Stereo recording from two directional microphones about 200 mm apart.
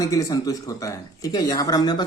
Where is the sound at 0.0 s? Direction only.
15° left (ahead or behind).